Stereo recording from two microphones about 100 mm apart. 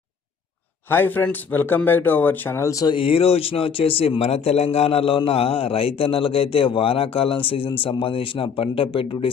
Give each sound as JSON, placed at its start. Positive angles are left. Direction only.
{"t": 0.9, "sound": "speech", "side_deg": 20}
{"t": 2.8, "sound": "speech", "side_deg": 60}